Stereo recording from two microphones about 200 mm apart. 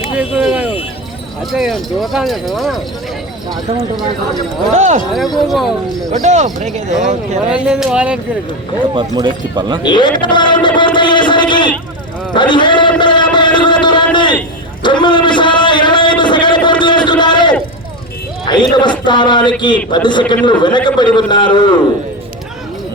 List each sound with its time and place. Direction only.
0.0 s a sound: 5° right (ahead or behind)
1.5 s speech: centre (ahead or behind)
4.7 s speech: 35° right (ahead or behind)
5.5 s speech: centre (ahead or behind)
6.2 s speech: 35° right (ahead or behind)
7.5 s speech: 5° right (ahead or behind)
8.9 s speech: 25° right (ahead or behind)
9.8 s a sound: 20° left (ahead or behind)
12.3 s a man's voice: 25° left (ahead or behind)
13.0 s a sound: 25° left (ahead or behind)
18.8 s a man's voice: 25° left (ahead or behind)